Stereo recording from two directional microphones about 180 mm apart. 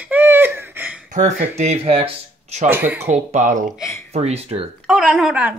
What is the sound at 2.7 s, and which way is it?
Speech, 10° right (ahead or behind).